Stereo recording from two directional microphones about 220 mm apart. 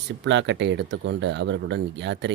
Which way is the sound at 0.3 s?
55° right (ahead or behind).